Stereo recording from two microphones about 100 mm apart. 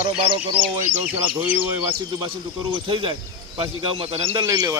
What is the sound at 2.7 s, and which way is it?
A man's voice, 60° right (ahead or behind).